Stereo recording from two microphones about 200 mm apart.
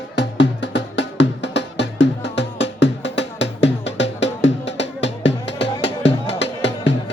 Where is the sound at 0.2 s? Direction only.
65° left (ahead or behind).